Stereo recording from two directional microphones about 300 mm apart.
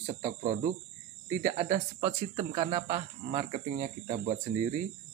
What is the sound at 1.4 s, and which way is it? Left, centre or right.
Speech, right.